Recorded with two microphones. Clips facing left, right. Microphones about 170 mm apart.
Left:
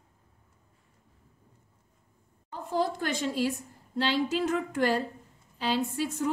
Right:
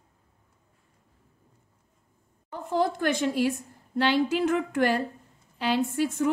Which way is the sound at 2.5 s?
60° right (ahead or behind).